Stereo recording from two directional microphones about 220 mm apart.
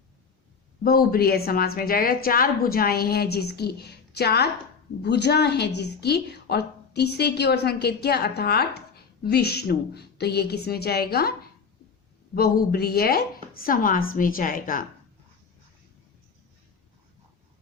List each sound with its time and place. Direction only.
0.9 s a woman's voice: 45° left (ahead or behind)